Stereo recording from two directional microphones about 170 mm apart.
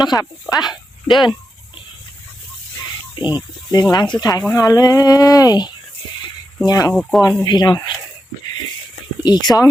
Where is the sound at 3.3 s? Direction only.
25° left (ahead or behind).